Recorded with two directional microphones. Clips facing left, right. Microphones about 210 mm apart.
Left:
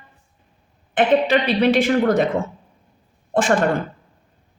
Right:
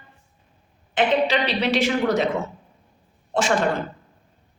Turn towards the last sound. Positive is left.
turn(degrees=55)  # may be behind; listen again after turning